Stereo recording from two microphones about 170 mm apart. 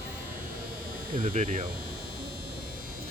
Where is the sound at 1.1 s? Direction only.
55° right (ahead or behind).